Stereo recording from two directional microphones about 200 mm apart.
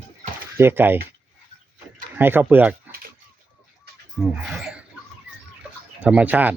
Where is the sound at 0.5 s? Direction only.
10° right (ahead or behind).